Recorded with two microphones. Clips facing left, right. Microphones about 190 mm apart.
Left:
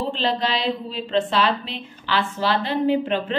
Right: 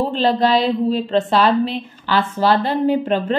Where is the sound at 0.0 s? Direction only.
45° right (ahead or behind).